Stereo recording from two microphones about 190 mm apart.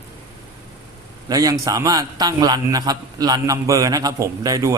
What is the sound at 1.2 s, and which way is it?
A man's voice, 20° right (ahead or behind).